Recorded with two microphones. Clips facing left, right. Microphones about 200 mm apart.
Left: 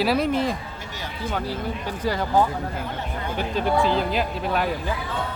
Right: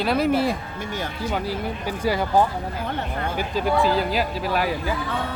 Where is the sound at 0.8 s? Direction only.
50° right (ahead or behind).